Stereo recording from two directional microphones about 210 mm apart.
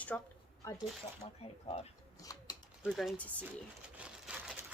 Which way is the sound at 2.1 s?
15° left (ahead or behind).